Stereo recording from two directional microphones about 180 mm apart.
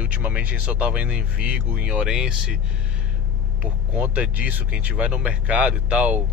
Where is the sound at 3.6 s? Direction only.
10° right (ahead or behind).